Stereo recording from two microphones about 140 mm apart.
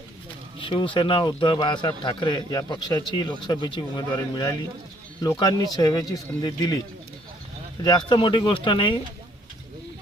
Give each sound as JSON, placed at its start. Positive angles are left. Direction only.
{"t": 0.6, "sound": "a man's voice", "side_deg": 35}
{"t": 7.8, "sound": "a man's voice", "side_deg": 30}